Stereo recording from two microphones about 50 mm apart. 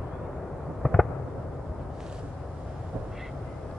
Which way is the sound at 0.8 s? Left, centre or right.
Centre.